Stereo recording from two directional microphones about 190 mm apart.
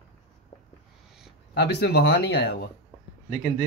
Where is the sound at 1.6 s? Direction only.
60° left (ahead or behind).